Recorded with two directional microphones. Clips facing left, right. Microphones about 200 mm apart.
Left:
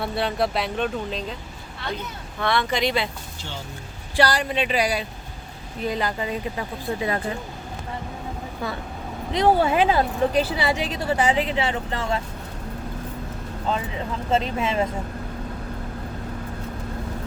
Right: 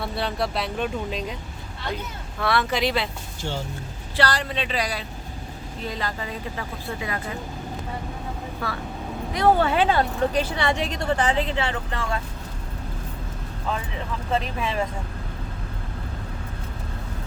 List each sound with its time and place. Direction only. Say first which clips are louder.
0.0 s speech: left 3 dB; centre (ahead or behind)
2.4 s speech: even; 5° right (ahead or behind)
4.2 s a woman's voice: left 3 dB; 15° left (ahead or behind)
8.6 s a woman's voice: left 1 dB; 20° left (ahead or behind)
11.7 s speech: left 3 dB; 25° left (ahead or behind)
13.7 s speech: left 3 dB; 25° left (ahead or behind)